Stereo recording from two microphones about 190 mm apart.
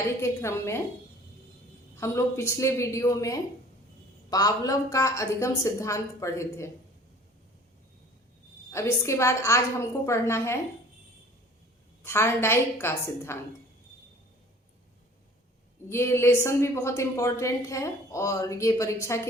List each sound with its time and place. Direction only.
0.2 s a woman's voice: 15° left (ahead or behind)
2.0 s a woman's voice: 15° left (ahead or behind)
8.7 s a woman's voice: 15° left (ahead or behind)
12.0 s a woman's voice: 15° left (ahead or behind)
15.9 s a woman's voice: 15° left (ahead or behind)